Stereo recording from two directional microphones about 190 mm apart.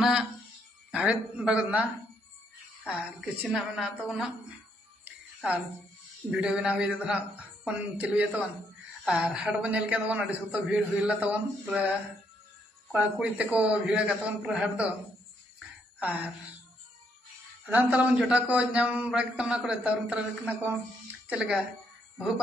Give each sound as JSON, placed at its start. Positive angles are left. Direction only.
{"t": 0.0, "sound": "a sound", "side_deg": -5}
{"t": 0.9, "sound": "a man's voice", "side_deg": -5}
{"t": 2.9, "sound": "speech", "side_deg": -5}
{"t": 5.0, "sound": "music", "side_deg": -10}
{"t": 6.3, "sound": "a man's voice", "side_deg": -5}
{"t": 12.9, "sound": "a man's voice", "side_deg": -5}
{"t": 16.0, "sound": "a sound", "side_deg": -5}
{"t": 17.6, "sound": "a man's voice", "side_deg": -10}